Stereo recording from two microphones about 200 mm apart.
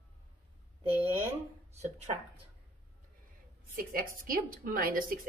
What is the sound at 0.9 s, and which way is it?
Speech, 10° right (ahead or behind).